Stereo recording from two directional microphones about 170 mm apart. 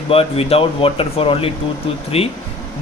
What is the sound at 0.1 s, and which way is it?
Speech, 35° left (ahead or behind).